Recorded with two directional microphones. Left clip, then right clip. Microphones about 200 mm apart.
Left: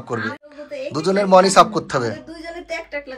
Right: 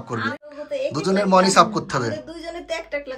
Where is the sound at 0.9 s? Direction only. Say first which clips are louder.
Left 5 dB; 5° right (ahead or behind).